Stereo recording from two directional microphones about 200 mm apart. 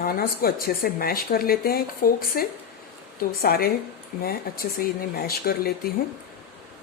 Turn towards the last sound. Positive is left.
turn(degrees=50)  # may be behind; listen again after turning